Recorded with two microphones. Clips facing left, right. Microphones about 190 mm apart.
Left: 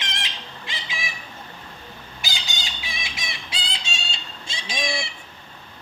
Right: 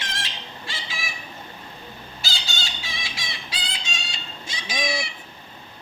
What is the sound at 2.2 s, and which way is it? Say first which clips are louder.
Fowl: even; 15° left (ahead or behind).